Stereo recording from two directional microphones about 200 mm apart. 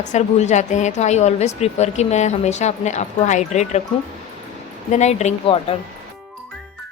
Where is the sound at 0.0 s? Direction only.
35° left (ahead or behind).